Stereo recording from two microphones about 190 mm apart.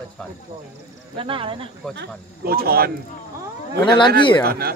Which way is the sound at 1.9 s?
55° right (ahead or behind).